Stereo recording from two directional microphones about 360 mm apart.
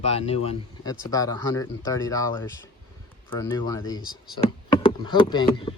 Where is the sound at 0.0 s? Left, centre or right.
Centre.